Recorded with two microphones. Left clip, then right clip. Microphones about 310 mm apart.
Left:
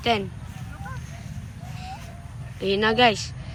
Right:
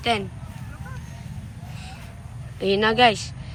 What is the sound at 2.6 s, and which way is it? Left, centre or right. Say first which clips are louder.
Speech: right 2 dB; centre.